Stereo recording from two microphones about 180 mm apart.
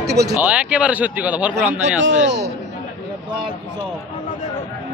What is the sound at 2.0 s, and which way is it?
Speech, 90° right.